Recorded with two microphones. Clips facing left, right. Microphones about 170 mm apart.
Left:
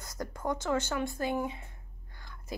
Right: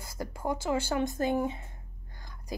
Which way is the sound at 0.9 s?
25° right (ahead or behind).